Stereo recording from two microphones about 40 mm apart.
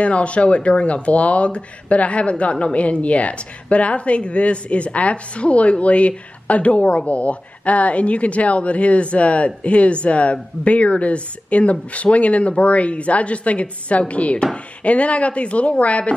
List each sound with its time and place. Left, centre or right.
0.0 s a woman's voice: left